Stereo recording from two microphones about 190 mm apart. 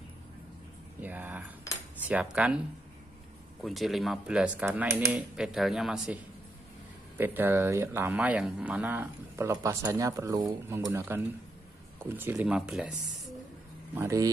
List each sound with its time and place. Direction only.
1.0 s a sound: 10° right (ahead or behind)
2.0 s speech: 5° right (ahead or behind)
3.6 s speech: centre (ahead or behind)
7.2 s speech: 10° right (ahead or behind)
13.9 s speech: 15° right (ahead or behind)